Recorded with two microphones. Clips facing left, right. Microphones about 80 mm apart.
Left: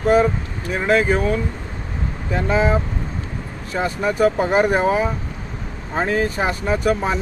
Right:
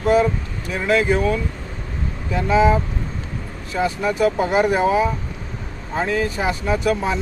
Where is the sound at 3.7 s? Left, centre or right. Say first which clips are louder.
Even; left.